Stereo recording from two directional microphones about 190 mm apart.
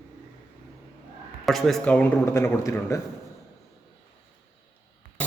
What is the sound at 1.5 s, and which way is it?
A man's voice, centre (ahead or behind).